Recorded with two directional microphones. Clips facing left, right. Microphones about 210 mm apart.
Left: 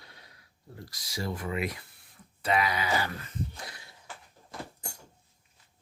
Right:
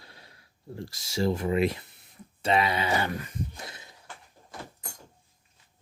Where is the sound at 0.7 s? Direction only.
25° right (ahead or behind).